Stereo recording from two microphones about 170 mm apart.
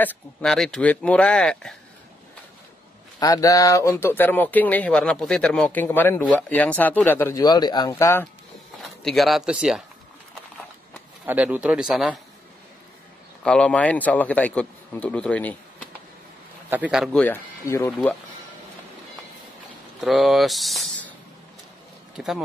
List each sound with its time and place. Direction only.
0.0 s speech: 5° left (ahead or behind)
3.2 s speech: 20° left (ahead or behind)
9.0 s speech: centre (ahead or behind)
11.2 s speech: 10° right (ahead or behind)
13.4 s speech: 5° left (ahead or behind)
16.6 s speech: 10° right (ahead or behind)
17.2 s speech: 15° left (ahead or behind)
20.0 s speech: centre (ahead or behind)
22.1 s speech: centre (ahead or behind)